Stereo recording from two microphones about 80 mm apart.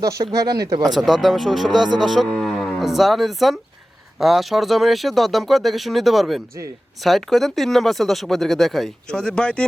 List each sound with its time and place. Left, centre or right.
0.0 s speech: right
0.9 s speech: centre